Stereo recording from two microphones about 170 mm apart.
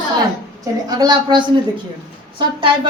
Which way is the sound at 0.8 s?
25° right (ahead or behind).